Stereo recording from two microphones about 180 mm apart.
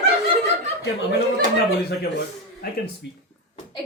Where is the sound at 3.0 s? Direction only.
70° left (ahead or behind).